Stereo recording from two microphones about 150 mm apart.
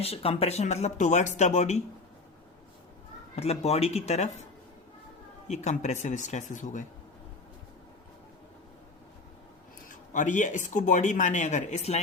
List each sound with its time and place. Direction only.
0.0 s speech: 40° left (ahead or behind)
3.3 s speech: 45° left (ahead or behind)
5.5 s speech: 50° left (ahead or behind)
10.1 s speech: 55° left (ahead or behind)